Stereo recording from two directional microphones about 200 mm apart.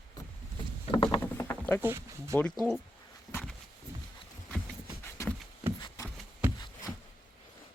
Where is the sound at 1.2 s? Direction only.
10° left (ahead or behind).